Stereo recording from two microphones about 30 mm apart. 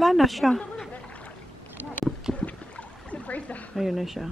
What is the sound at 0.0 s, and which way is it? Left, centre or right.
Speech, centre.